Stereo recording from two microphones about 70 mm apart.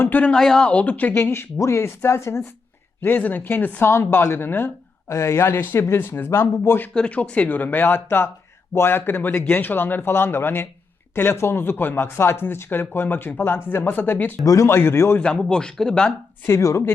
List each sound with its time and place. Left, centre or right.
0.0 s speech: left
0.3 s speech: centre
0.7 s speech: left
1.1 s speech: left
3.0 s speech: left
5.0 s speech: left
6.9 s speech: centre
14.4 s speech: left
14.7 s speech: left
15.2 s speech: centre
16.5 s speech: left